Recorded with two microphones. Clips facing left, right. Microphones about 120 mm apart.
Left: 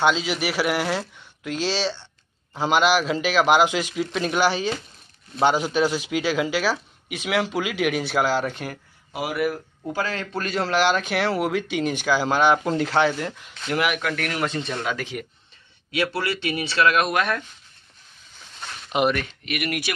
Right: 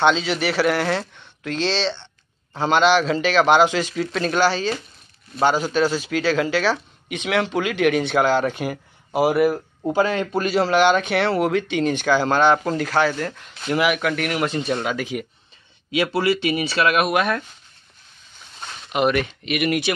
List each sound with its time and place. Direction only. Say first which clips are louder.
0.0 s speech: right 3 dB; 5° left (ahead or behind)
8.5 s speech: right 6 dB; 5° right (ahead or behind)
9.1 s a man's voice: right 8 dB; 30° right (ahead or behind); by 12.7 s 10° left (ahead or behind)
12.7 s speech: even; 25° left (ahead or behind)
13.7 s speech: right 4 dB; 5° right (ahead or behind)
18.9 s speech: right 1 dB; 20° left (ahead or behind)
19.4 s speech: right 6 dB; 20° right (ahead or behind)